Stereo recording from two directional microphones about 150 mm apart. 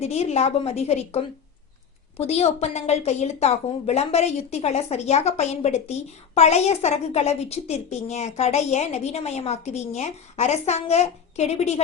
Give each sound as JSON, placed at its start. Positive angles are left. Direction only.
{"t": 0.0, "sound": "a woman's voice", "side_deg": 45}